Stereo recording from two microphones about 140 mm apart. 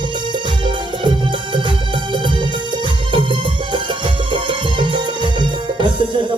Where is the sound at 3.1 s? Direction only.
35° right (ahead or behind).